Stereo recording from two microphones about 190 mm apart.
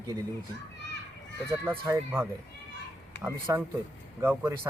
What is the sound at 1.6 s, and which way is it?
Speech, 15° right (ahead or behind).